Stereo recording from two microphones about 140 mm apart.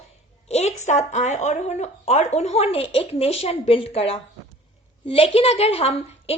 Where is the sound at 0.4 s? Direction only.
50° left (ahead or behind).